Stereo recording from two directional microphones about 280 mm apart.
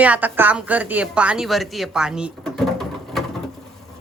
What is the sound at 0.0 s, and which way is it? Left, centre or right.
A woman's voice, centre.